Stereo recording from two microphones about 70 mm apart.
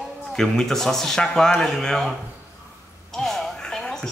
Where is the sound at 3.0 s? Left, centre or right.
Centre.